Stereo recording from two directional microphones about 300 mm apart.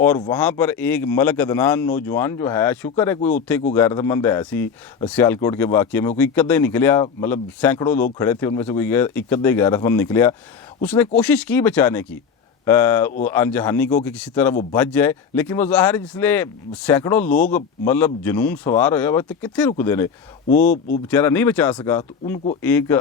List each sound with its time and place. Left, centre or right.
0.0 s speech: centre
20.5 s speech: left
21.1 s speech: centre